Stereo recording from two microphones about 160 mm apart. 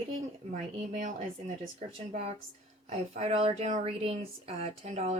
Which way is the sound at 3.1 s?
40° right (ahead or behind).